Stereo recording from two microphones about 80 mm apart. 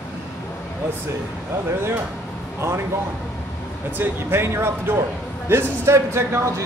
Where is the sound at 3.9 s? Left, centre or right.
Right.